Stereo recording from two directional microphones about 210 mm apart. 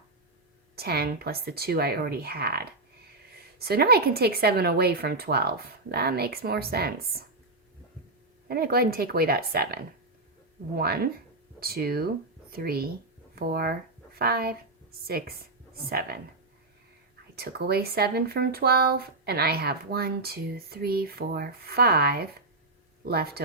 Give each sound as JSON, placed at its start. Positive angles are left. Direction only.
{"t": 0.8, "sound": "speech", "side_deg": -50}
{"t": 8.4, "sound": "speech", "side_deg": -45}
{"t": 17.3, "sound": "speech", "side_deg": -50}